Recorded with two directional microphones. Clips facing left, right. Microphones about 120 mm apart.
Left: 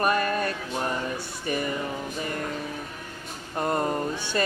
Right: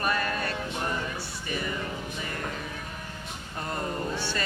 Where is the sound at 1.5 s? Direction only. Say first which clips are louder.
Left 5 dB; 45° left (ahead or behind).